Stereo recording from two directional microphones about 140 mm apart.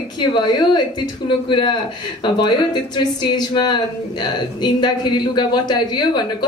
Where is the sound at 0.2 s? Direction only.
30° left (ahead or behind).